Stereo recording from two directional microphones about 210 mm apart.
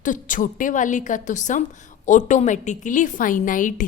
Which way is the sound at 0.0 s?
40° left (ahead or behind).